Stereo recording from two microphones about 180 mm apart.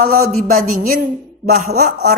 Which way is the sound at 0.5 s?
50° right (ahead or behind).